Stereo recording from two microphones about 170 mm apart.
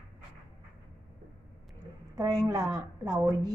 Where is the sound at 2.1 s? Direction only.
20° right (ahead or behind).